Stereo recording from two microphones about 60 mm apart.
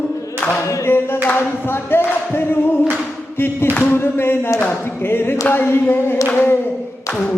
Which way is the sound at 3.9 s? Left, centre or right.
Left.